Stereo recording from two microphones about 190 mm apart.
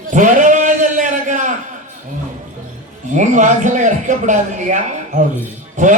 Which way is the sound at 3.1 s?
40° right (ahead or behind).